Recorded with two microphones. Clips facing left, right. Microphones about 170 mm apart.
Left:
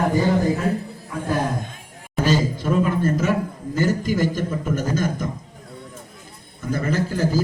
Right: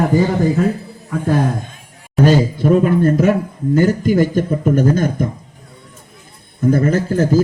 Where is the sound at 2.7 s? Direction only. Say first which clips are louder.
Right 7 dB; 55° right (ahead or behind).